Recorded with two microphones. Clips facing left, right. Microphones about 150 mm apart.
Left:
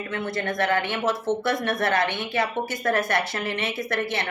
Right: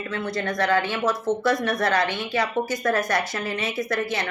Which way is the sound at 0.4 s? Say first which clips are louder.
Right 2 dB; 25° left (ahead or behind).